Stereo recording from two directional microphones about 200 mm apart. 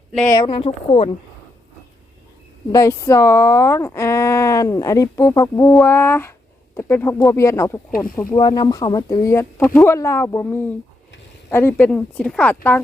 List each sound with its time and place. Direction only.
0.4 s speech: 30° left (ahead or behind)
2.7 s speech: 15° left (ahead or behind)